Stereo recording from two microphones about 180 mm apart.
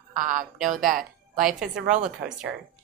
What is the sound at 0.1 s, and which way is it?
A woman's voice, 45° right (ahead or behind).